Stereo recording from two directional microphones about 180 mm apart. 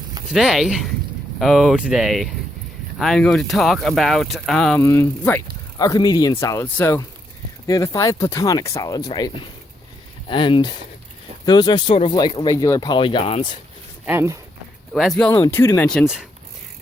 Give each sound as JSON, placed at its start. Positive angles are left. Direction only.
{"t": 0.3, "sound": "speech", "side_deg": 0}
{"t": 14.0, "sound": "speech", "side_deg": -10}
{"t": 14.9, "sound": "speech", "side_deg": 0}
{"t": 15.4, "sound": "speech", "side_deg": 15}